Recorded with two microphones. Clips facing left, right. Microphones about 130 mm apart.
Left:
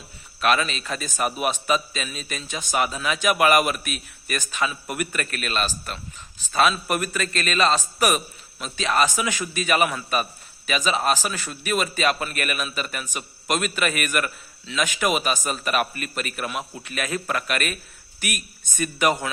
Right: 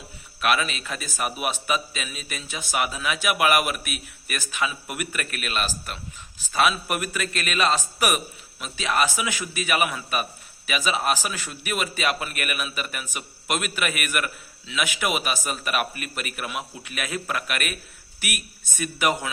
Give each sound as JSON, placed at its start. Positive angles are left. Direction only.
{"t": 0.4, "sound": "a man's voice", "side_deg": -10}